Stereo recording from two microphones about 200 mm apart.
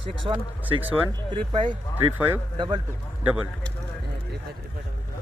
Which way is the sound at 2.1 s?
10° right (ahead or behind).